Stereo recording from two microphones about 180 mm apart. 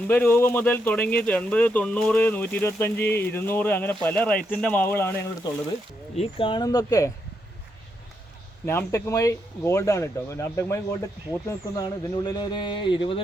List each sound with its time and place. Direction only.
0.1 s speech: 10° left (ahead or behind)
6.1 s speech: 30° left (ahead or behind)
8.6 s speech: 15° left (ahead or behind)